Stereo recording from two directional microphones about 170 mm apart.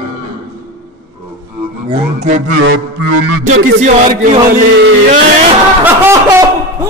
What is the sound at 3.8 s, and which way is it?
Speech, 50° right (ahead or behind).